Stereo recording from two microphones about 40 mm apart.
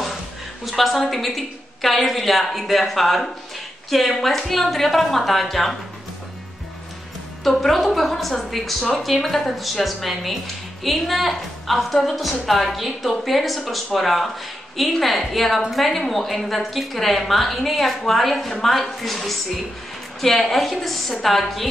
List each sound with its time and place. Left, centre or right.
0.7 s speech: centre
7.4 s speech: centre